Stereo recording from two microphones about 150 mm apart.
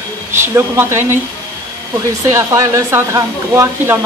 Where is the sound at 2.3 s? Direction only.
20° right (ahead or behind).